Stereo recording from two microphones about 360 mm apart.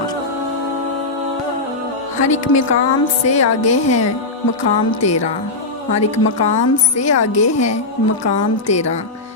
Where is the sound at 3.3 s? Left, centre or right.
Left.